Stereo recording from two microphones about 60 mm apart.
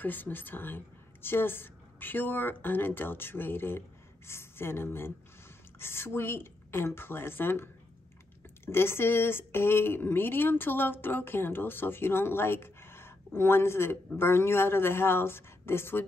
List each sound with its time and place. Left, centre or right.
0.0 s speech: left